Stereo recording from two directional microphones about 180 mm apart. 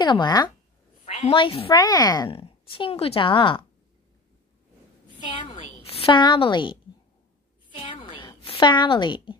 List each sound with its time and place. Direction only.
0.0 s a woman's voice: 25° left (ahead or behind)
1.0 s a woman's voice: 35° left (ahead or behind)
5.5 s a woman's voice: 40° left (ahead or behind)
7.7 s a sound: 30° left (ahead or behind)
8.5 s a woman's voice: 25° left (ahead or behind)